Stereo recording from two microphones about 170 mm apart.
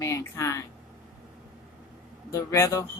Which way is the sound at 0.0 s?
20° left (ahead or behind).